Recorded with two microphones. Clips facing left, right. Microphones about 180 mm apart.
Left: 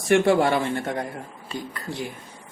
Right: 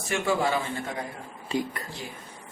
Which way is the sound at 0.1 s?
65° left (ahead or behind).